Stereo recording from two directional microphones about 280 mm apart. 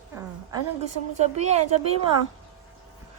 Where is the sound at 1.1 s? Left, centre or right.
Right.